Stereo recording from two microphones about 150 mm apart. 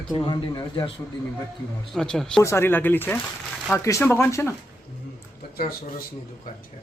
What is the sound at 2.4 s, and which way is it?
A man's voice, 15° left (ahead or behind).